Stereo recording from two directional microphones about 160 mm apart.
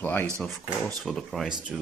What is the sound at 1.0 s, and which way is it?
Speech, centre (ahead or behind).